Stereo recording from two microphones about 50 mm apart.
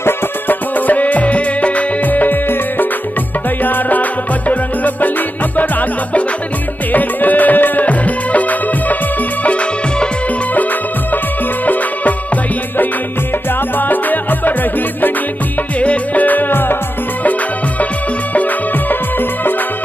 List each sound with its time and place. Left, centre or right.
0.0 s music: left
3.6 s music: left
11.6 s music: left
13.7 s music: left
15.8 s music: left
17.2 s music: left